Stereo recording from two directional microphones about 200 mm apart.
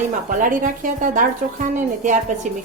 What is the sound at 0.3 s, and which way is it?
A woman's voice, 40° right (ahead or behind).